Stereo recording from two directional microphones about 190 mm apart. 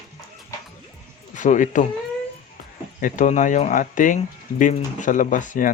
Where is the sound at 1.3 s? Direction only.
40° left (ahead or behind).